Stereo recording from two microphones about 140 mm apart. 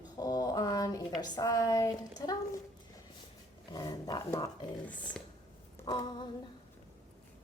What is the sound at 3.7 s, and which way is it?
Speech, 30° left (ahead or behind).